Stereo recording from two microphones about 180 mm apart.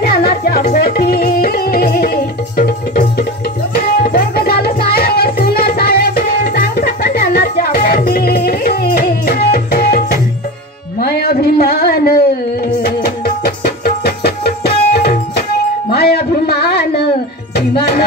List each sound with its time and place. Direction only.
0.0 s music: 60° left (ahead or behind)
3.7 s tabla: 55° left (ahead or behind)
11.0 s a sound: 60° left (ahead or behind)
12.8 s music: 60° left (ahead or behind)
15.9 s a sound: 60° left (ahead or behind)
17.6 s music: 60° left (ahead or behind)